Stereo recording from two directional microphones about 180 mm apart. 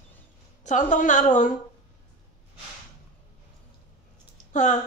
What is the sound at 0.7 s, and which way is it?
Speech, 45° left (ahead or behind).